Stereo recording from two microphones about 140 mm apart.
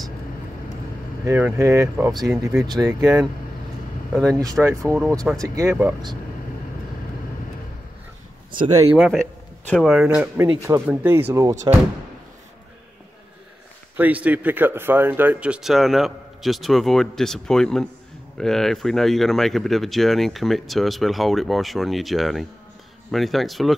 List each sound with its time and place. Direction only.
1.2 s speech: 15° right (ahead or behind)
2.2 s speech: 5° right (ahead or behind)
2.6 s speech: 30° right (ahead or behind)
4.3 s speech: 25° right (ahead or behind)
8.9 s speech: 5° right (ahead or behind)
10.0 s speech: 15° right (ahead or behind)
11.7 s speech: 30° right (ahead or behind)
13.9 s speech: 10° right (ahead or behind)